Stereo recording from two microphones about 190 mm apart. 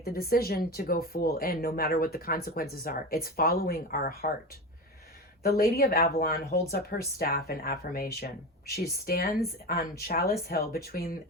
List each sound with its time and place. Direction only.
0.0 s speech: 50° left (ahead or behind)
5.4 s speech: 50° left (ahead or behind)